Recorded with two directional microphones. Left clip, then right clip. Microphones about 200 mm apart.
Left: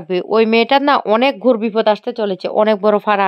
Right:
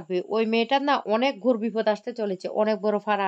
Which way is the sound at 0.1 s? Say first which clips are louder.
Left 11 dB; 35° left (ahead or behind).